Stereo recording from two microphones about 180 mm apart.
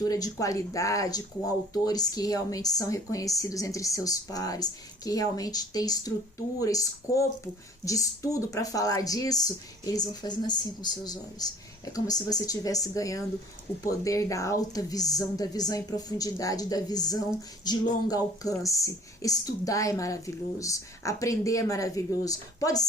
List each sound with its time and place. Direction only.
0.0 s speech: 20° left (ahead or behind)